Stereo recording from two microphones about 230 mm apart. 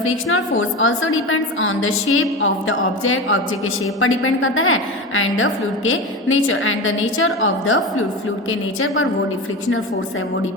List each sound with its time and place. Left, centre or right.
0.0 s a woman's voice: left